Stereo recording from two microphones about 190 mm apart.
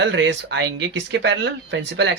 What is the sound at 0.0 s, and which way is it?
Speech, 70° right (ahead or behind).